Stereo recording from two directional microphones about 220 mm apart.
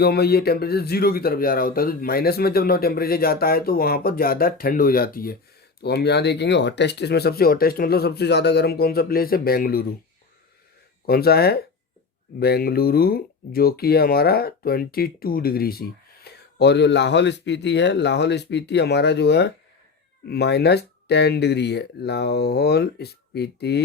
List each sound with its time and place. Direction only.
0.0 s speech: 45° left (ahead or behind)
11.0 s speech: 45° left (ahead or behind)